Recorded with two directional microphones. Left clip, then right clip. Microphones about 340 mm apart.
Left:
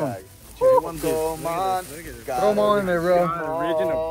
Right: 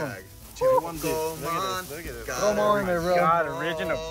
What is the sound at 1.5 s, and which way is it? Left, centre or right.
Speech, centre.